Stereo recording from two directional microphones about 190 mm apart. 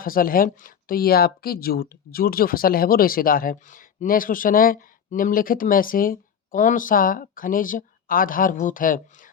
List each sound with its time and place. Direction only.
0.0 s speech: 50° left (ahead or behind)